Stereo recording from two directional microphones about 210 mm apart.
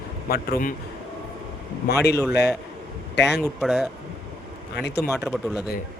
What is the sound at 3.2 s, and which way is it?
Speech, 55° left (ahead or behind).